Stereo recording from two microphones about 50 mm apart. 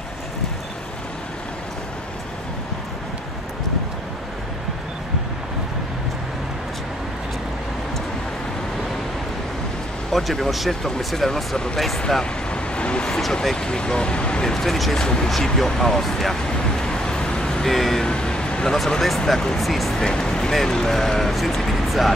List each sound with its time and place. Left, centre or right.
10.1 s speech: centre
12.1 s vehicle: centre
13.3 s speech: centre
15.0 s speech: centre
15.2 s speech: centre
16.8 s vehicle: centre
18.0 s vehicle: centre
18.8 s speech: centre